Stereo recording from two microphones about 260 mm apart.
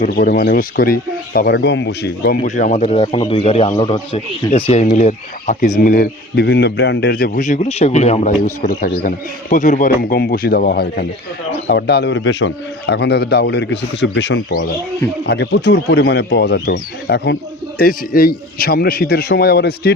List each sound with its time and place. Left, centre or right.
0.0 s a man's voice: left